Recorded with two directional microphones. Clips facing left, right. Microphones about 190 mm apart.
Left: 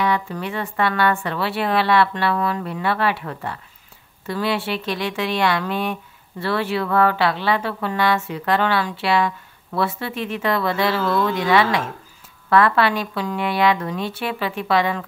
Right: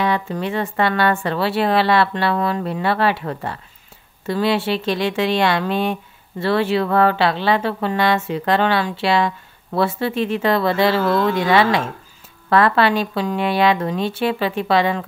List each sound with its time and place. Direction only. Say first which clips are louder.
0.0 s speech: right 2 dB; 25° right (ahead or behind)